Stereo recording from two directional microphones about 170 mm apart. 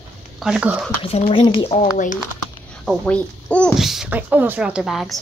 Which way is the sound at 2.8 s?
5° left (ahead or behind).